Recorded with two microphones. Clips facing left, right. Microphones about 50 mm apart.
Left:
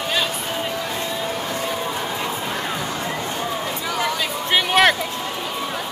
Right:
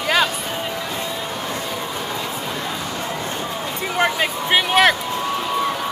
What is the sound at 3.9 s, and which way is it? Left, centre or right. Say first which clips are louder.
Speech: right 5 dB; right.